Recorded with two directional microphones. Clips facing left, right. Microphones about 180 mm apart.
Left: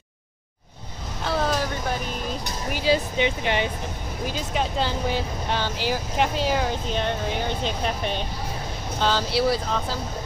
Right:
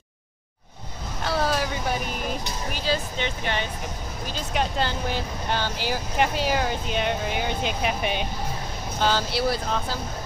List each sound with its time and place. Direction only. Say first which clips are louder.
1.2 s vehicle: even; 5° right (ahead or behind)
2.7 s speech: left 6 dB; 15° left (ahead or behind)
4.6 s speech: even; centre (ahead or behind)